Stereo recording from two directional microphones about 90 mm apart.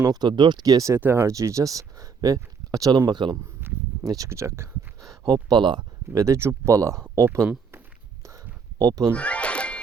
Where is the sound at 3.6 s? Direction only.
25° right (ahead or behind).